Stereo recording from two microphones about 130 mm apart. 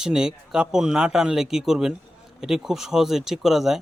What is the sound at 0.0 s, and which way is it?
Speech, 5° right (ahead or behind).